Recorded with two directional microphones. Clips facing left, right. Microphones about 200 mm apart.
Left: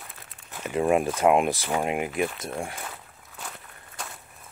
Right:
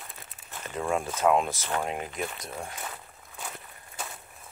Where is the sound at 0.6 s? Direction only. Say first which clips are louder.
Left 7 dB; 15° left (ahead or behind).